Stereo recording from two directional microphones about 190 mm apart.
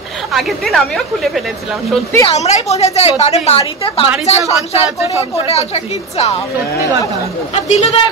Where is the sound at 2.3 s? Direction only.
35° left (ahead or behind).